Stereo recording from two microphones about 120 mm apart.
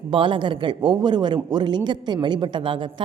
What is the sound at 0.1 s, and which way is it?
A woman's voice, 45° right (ahead or behind).